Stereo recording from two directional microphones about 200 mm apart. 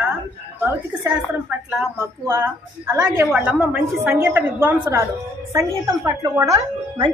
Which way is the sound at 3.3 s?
5° right (ahead or behind).